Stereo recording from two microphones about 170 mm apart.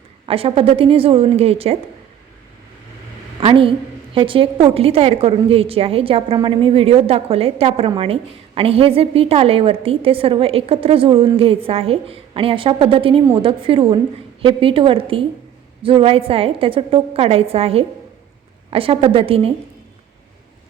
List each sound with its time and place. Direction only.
0.3 s a woman's voice: 35° right (ahead or behind)
3.4 s a woman's voice: 30° right (ahead or behind)